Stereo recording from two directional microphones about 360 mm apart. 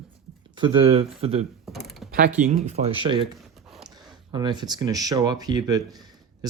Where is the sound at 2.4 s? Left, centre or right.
Centre.